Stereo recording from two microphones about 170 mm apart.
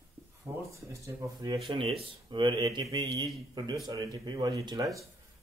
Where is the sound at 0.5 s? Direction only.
10° right (ahead or behind).